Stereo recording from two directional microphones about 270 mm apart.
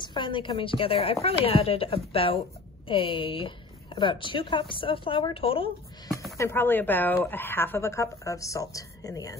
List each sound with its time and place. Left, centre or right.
0.0 s speech: centre